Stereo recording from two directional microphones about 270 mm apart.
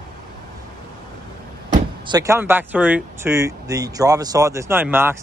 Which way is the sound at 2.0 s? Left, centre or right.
Centre.